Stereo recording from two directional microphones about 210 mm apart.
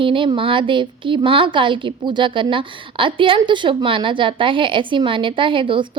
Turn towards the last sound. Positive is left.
turn(degrees=-25)  # may be behind; listen again after turning